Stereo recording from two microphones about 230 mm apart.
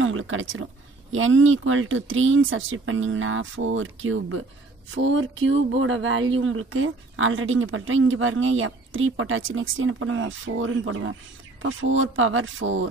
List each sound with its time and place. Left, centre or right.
0.0 s speech: right